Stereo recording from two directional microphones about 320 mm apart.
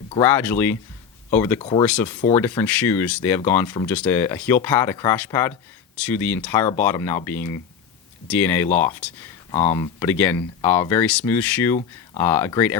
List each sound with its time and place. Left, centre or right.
0.2 s speech: centre